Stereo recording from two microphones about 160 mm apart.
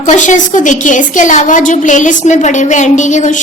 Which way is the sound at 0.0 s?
50° left (ahead or behind).